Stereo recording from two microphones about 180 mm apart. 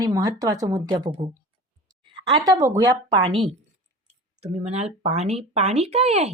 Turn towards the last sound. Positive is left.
turn(degrees=-35)  # may be behind; listen again after turning